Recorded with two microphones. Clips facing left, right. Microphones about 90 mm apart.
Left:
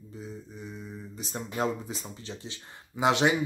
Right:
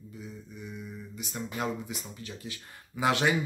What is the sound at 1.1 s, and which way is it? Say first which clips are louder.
Speech: left 3 dB; 35° left (ahead or behind).